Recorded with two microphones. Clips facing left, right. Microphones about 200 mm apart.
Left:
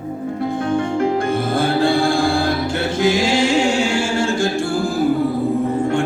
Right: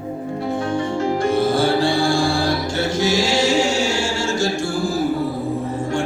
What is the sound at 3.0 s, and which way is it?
A capella, 55° left (ahead or behind).